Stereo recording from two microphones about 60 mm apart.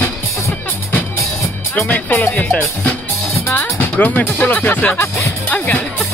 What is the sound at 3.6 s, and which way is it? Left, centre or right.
Speech, left.